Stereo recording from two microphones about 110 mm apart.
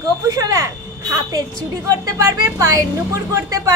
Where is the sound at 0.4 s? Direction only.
30° right (ahead or behind).